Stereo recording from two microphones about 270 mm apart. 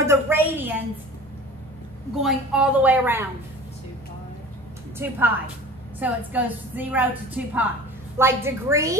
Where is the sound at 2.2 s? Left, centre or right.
Centre.